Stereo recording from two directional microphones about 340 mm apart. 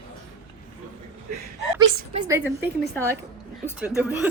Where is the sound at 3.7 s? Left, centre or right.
Centre.